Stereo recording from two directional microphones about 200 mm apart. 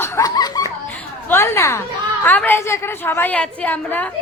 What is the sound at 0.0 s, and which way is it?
Laughter, 20° left (ahead or behind).